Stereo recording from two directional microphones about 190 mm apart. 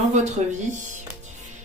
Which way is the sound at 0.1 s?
35° right (ahead or behind).